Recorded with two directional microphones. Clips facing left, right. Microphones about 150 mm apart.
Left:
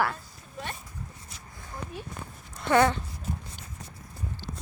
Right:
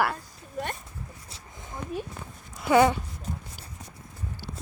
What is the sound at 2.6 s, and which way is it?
Speech, 10° right (ahead or behind).